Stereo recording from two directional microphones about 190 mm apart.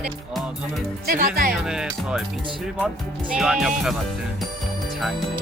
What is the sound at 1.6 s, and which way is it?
Speech, centre (ahead or behind).